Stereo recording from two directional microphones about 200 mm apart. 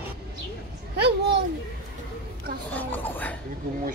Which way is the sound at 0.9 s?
55° right (ahead or behind).